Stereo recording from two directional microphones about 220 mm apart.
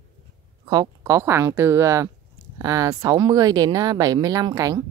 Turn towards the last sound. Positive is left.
turn(degrees=-15)  # may be behind; listen again after turning